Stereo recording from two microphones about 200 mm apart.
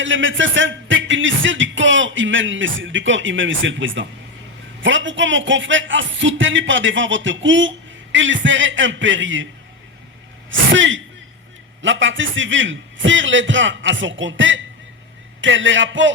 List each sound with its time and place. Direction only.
0.0 s speech: 70° right (ahead or behind)
10.5 s speech: 70° right (ahead or behind)